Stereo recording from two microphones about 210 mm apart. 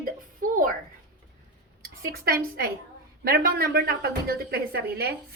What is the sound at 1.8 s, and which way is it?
A woman's voice, 45° right (ahead or behind).